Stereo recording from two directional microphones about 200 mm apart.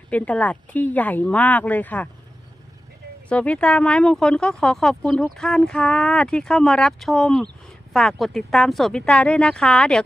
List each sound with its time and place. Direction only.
0.1 s speech: 5° left (ahead or behind)
3.2 s speech: 5° left (ahead or behind)